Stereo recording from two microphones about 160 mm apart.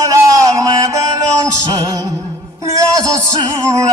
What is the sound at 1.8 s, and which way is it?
Music, 20° right (ahead or behind).